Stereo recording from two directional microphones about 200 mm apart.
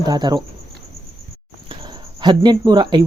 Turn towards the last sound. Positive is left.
turn(degrees=-20)  # may be behind; listen again after turning